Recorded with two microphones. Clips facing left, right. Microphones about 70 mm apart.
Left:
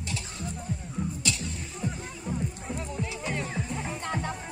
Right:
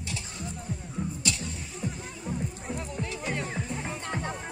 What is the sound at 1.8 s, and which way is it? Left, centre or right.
Music, centre.